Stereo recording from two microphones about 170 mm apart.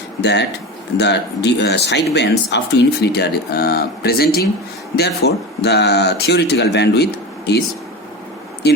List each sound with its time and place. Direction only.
0.2 s speech: 80° left
8.6 s speech: 75° left (ahead or behind)